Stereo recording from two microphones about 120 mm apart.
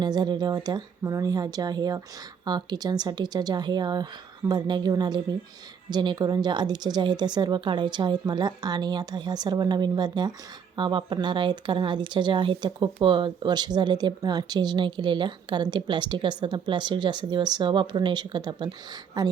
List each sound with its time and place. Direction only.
0.0 s speech: 35° right (ahead or behind)